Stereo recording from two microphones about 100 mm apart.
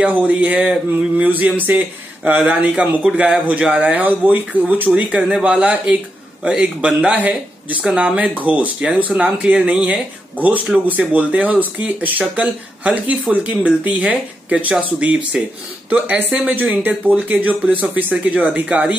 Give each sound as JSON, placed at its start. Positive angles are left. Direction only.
{"t": 0.0, "sound": "speech", "side_deg": -15}